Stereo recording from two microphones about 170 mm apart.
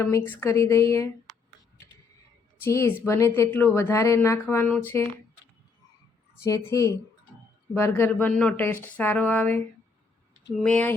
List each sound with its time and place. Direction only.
0.0 s speech: 15° left (ahead or behind)
2.6 s speech: 15° left (ahead or behind)
6.4 s speech: 15° left (ahead or behind)
10.6 s speech: 5° left (ahead or behind)